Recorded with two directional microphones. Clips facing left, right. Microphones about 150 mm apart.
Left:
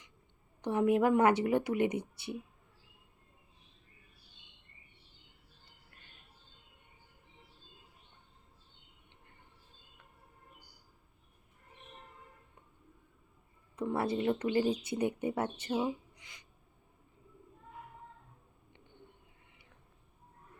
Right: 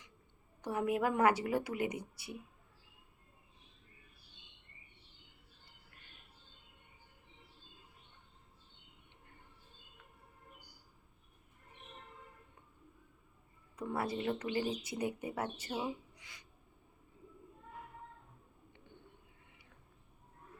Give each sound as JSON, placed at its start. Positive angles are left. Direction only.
{"t": 0.6, "sound": "speech", "side_deg": 25}
{"t": 13.7, "sound": "speech", "side_deg": 25}